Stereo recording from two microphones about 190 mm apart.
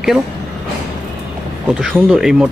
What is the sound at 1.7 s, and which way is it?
Speech, 5° right (ahead or behind).